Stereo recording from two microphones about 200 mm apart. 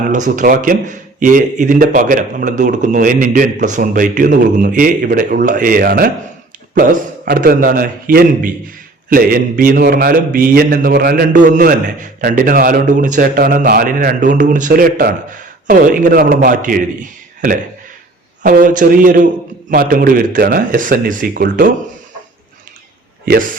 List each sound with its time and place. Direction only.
0.1 s speech: 40° right (ahead or behind)
7.3 s a man's voice: 45° right (ahead or behind)
18.4 s a man's voice: 40° right (ahead or behind)
23.2 s speech: 50° right (ahead or behind)